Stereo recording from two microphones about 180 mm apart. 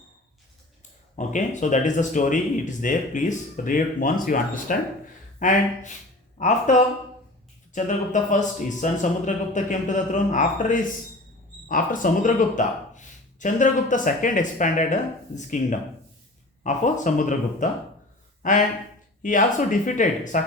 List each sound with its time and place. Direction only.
1.1 s speech: 40° left (ahead or behind)